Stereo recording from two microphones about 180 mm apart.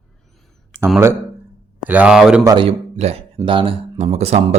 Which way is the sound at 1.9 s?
5° right (ahead or behind).